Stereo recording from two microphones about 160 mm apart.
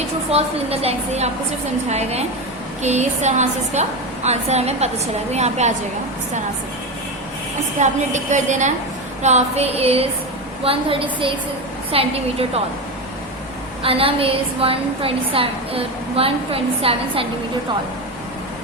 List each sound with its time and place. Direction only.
0.3 s a woman's voice: 40° right (ahead or behind)
7.8 s a woman's voice: 50° right (ahead or behind)
13.8 s a woman's voice: 35° right (ahead or behind)